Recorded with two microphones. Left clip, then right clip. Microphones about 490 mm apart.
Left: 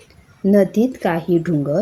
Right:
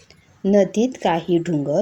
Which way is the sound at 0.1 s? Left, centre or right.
Left.